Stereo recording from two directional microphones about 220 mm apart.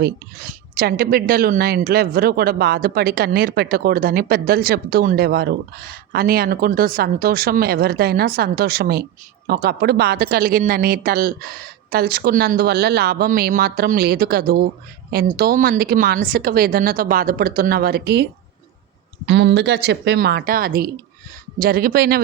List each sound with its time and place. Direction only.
0.0 s speech: 45° right (ahead or behind)